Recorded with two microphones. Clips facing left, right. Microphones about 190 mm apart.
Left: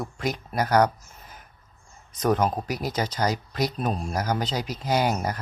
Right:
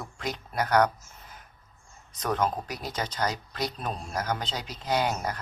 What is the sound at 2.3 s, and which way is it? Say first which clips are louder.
Speech: left 3 dB; 10° left (ahead or behind).